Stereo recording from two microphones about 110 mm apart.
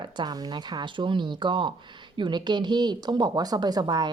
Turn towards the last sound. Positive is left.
turn(degrees=-40)  # may be behind; listen again after turning